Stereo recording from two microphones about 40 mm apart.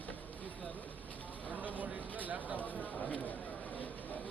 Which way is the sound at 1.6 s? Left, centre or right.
Right.